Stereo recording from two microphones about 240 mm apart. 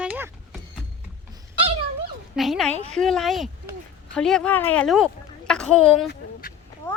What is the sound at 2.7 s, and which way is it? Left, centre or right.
Speech, right.